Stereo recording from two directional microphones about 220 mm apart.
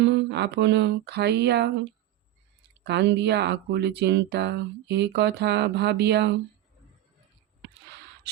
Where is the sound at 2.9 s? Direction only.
50° right (ahead or behind).